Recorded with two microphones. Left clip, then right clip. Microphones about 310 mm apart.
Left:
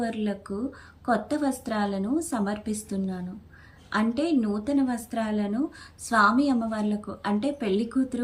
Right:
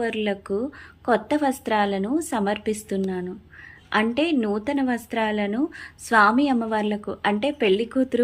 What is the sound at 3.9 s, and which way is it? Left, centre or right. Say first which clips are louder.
A woman's voice: right 4 dB; centre.